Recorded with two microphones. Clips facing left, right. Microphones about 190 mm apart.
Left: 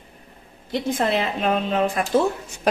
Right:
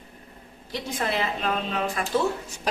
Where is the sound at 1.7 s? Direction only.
50° left (ahead or behind).